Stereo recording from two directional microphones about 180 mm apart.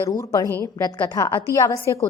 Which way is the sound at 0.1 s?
20° left (ahead or behind).